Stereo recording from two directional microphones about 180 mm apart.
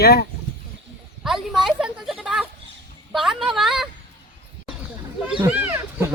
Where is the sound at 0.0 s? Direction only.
60° left (ahead or behind).